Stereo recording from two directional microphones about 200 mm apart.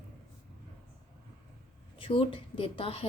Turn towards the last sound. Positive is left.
turn(degrees=25)  # may be behind; listen again after turning